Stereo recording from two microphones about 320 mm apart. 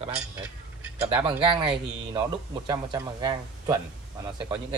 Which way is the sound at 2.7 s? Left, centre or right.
Centre.